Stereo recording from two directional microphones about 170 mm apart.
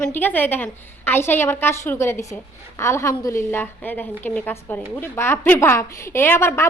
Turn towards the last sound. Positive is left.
turn(degrees=15)  # may be behind; listen again after turning